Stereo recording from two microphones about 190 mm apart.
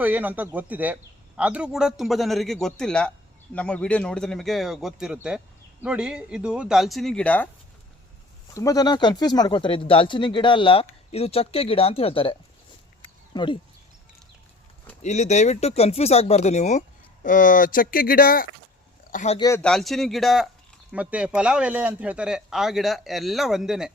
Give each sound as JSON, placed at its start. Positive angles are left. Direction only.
{"t": 0.0, "sound": "speech", "side_deg": -10}
{"t": 8.5, "sound": "speech", "side_deg": 20}
{"t": 15.0, "sound": "speech", "side_deg": 40}
{"t": 19.1, "sound": "speech", "side_deg": 35}
{"t": 19.4, "sound": "speech", "side_deg": 15}
{"t": 19.6, "sound": "speech", "side_deg": 0}